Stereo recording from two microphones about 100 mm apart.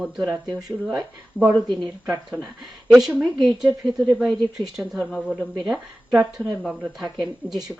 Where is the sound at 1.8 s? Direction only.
10° right (ahead or behind).